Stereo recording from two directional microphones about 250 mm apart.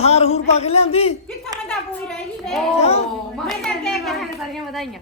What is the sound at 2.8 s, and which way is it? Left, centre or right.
Speech, left.